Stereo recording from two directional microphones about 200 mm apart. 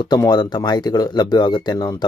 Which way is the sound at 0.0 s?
20° left (ahead or behind).